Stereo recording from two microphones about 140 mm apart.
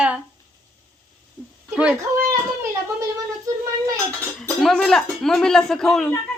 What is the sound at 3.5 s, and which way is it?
Child singing, 25° right (ahead or behind).